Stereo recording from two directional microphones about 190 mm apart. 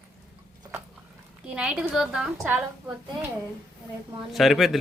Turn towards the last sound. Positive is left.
turn(degrees=0)  # may be behind; listen again after turning